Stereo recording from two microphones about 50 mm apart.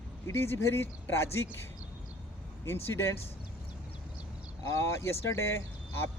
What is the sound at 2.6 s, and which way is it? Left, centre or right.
Speech, left.